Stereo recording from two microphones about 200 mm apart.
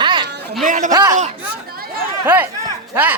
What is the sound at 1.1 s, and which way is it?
Chatter, 45° right (ahead or behind).